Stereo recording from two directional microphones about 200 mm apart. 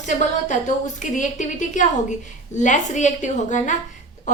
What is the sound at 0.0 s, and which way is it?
A woman's voice, 35° left (ahead or behind).